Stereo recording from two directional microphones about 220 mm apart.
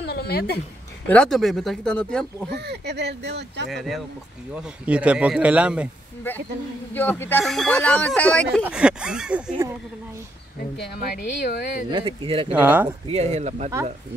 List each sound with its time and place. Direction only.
0.0 s a sound: 45° left (ahead or behind)
1.0 s speech: 5° left (ahead or behind)
2.5 s speech: 50° right (ahead or behind)
3.7 s speech: centre (ahead or behind)
6.9 s speech: 10° left (ahead or behind)
10.8 s speech: 45° left (ahead or behind)
11.9 s speech: 20° right (ahead or behind)
12.5 s speech: 5° right (ahead or behind)
13.1 s speech: 30° right (ahead or behind)